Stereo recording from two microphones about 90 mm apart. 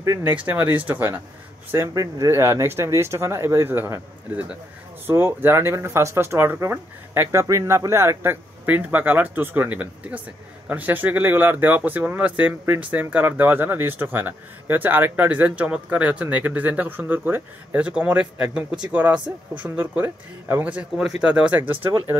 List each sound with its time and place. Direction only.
0.5 s speech: 25° right (ahead or behind)